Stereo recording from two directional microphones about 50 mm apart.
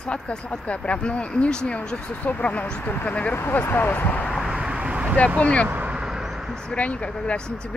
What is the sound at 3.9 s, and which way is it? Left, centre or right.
Speech, left.